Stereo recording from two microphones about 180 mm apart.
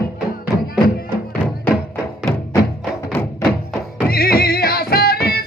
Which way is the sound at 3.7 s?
Centre (ahead or behind).